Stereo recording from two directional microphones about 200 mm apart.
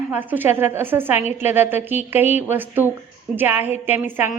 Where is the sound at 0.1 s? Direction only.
10° right (ahead or behind).